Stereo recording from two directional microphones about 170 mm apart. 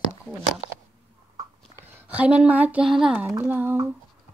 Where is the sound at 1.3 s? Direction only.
20° right (ahead or behind).